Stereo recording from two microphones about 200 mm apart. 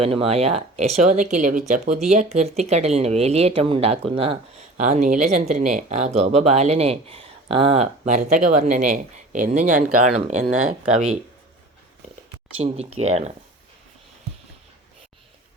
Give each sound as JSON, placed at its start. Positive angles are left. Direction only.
{"t": 0.0, "sound": "speech", "side_deg": -30}
{"t": 12.5, "sound": "speech", "side_deg": -30}